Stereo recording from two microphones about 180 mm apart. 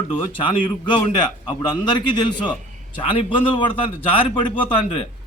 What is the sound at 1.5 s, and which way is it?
Speech, 25° left (ahead or behind).